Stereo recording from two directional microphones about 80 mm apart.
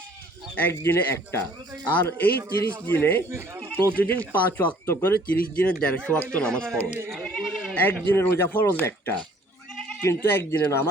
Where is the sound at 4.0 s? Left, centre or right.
Left; by 7.7 s centre.